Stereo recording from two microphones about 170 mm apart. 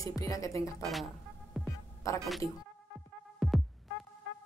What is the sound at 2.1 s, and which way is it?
Speech, 20° left (ahead or behind).